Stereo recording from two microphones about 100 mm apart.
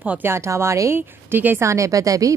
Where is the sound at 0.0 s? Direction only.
20° right (ahead or behind).